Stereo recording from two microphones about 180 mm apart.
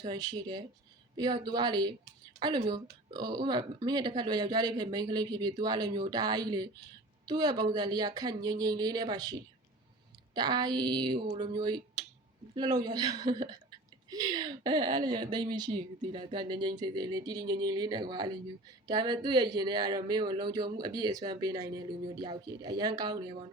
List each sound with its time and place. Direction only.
0.0 s speech: 20° right (ahead or behind)